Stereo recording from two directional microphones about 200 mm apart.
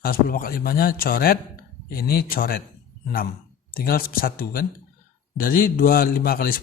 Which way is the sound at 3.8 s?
50° left (ahead or behind).